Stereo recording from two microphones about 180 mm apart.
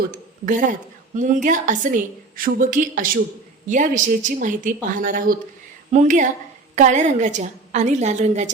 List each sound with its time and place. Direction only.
0.1 s a woman's voice: 50° right (ahead or behind)